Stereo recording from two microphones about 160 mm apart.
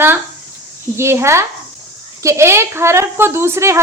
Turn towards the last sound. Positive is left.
turn(degrees=-15)  # may be behind; listen again after turning